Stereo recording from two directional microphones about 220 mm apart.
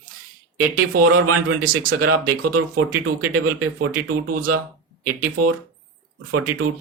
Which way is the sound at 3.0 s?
90° right.